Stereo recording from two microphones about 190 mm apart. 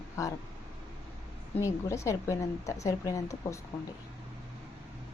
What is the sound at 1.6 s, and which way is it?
Speech, 15° left (ahead or behind).